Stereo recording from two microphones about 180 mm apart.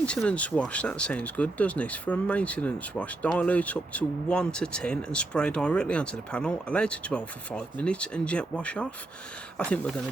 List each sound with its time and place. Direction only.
0.0 s speech: 5° left (ahead or behind)